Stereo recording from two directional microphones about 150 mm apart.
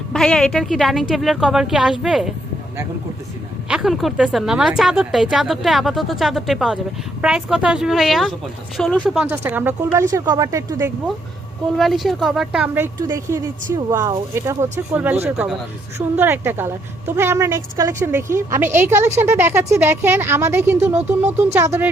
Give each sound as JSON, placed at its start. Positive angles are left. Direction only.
{"t": 0.1, "sound": "a woman's voice", "side_deg": 5}
{"t": 3.7, "sound": "a woman's voice", "side_deg": -5}
{"t": 10.1, "sound": "speech", "side_deg": -25}
{"t": 11.8, "sound": "a woman's voice", "side_deg": 0}